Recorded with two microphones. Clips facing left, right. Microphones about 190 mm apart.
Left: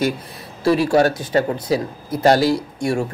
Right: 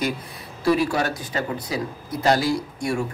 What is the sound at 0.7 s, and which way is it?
A man's voice, 30° left (ahead or behind).